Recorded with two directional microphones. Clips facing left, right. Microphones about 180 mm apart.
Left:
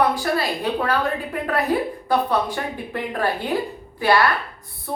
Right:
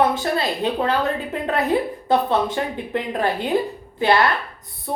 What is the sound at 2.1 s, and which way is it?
Speech, 25° right (ahead or behind).